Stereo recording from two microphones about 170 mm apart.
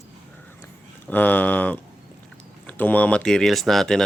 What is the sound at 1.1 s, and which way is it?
Speech, 10° left (ahead or behind).